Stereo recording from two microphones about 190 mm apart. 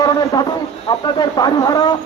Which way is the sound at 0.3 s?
20° left (ahead or behind).